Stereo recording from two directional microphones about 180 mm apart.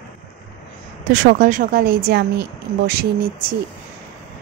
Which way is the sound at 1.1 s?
50° right (ahead or behind).